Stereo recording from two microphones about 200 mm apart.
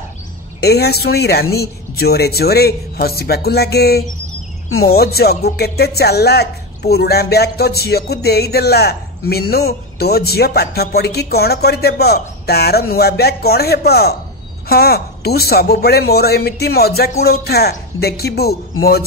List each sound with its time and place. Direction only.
0.6 s speech: 55° left (ahead or behind)